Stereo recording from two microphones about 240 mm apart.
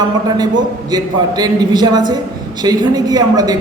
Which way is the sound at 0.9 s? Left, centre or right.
Centre.